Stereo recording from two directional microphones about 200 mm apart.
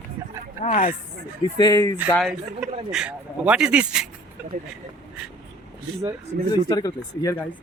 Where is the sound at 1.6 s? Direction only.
20° left (ahead or behind).